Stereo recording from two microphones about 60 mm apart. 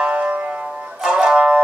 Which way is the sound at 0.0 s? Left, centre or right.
Right.